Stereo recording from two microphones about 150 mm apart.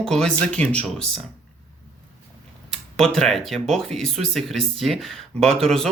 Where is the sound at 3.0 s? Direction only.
5° left (ahead or behind).